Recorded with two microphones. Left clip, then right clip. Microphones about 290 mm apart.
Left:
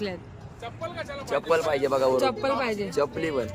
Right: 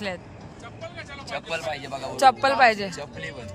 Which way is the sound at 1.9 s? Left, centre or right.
Left.